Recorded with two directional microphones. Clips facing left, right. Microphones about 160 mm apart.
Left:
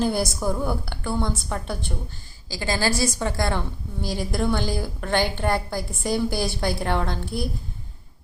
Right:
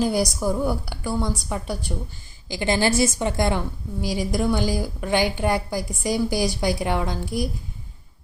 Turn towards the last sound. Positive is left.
turn(degrees=-15)  # may be behind; listen again after turning